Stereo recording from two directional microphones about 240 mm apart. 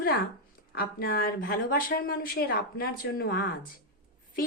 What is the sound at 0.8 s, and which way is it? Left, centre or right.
A woman's voice, left.